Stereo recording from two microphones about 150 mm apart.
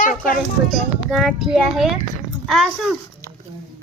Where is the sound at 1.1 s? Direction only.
Centre (ahead or behind).